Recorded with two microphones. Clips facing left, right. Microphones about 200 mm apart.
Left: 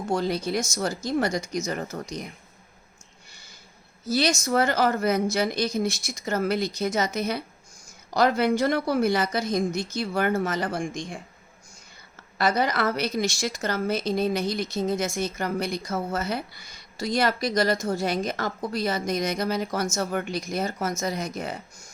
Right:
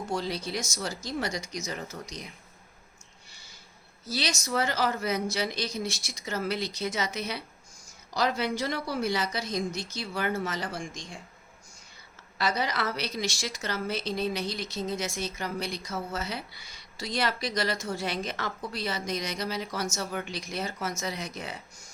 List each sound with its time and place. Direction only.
0.1 s speech: 50° left (ahead or behind)
3.2 s a sound: 50° left (ahead or behind)
4.0 s speech: 50° left (ahead or behind)
12.4 s speech: 50° left (ahead or behind)